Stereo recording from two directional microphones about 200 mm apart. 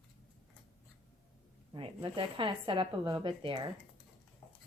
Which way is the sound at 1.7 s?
25° right (ahead or behind).